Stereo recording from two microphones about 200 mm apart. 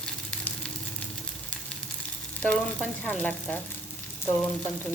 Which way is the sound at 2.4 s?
5° left (ahead or behind).